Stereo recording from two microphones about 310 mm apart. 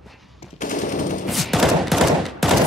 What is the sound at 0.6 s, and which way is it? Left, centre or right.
Machine gun, left.